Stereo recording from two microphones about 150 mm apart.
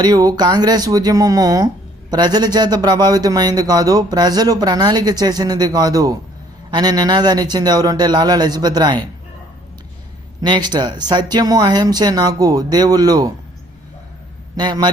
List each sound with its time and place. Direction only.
0.0 s speech: 25° right (ahead or behind)
10.4 s speech: 30° right (ahead or behind)
14.5 s speech: 30° right (ahead or behind)